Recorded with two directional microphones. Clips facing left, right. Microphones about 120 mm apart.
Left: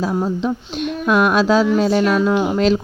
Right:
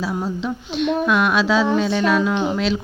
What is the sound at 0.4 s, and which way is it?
A woman's voice, 45° left (ahead or behind).